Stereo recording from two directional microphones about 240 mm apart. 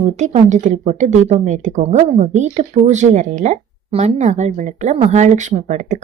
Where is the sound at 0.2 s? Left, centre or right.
Right.